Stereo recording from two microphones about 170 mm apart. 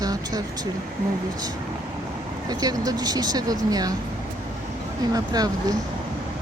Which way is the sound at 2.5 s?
20° right (ahead or behind).